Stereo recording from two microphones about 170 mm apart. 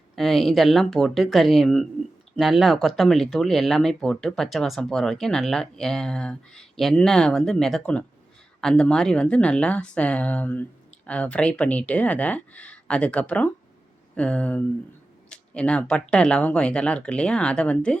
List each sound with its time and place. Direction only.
0.2 s speech: centre (ahead or behind)